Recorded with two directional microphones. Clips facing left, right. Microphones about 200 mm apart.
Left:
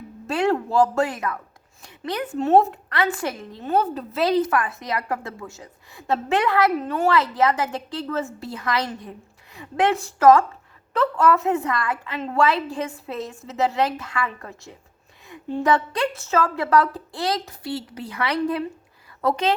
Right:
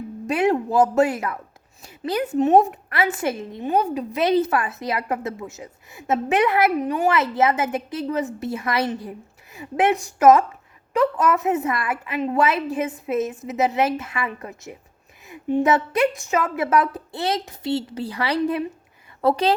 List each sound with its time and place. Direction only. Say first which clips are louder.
0.3 s speech: right 2 dB; 15° right (ahead or behind)
3.6 s a woman's voice: even; 15° right (ahead or behind); by 19.5 s 35° right (ahead or behind)